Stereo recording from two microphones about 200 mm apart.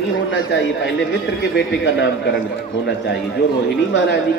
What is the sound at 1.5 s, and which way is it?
Speech, 65° left (ahead or behind).